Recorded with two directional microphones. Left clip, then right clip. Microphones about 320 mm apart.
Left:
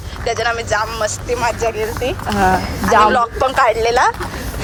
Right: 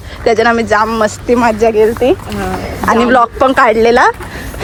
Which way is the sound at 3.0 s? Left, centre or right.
Right.